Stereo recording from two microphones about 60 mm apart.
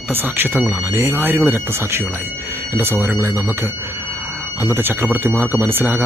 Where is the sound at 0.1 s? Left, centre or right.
Right.